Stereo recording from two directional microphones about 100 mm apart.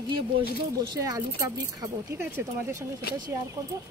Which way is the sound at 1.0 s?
35° right (ahead or behind).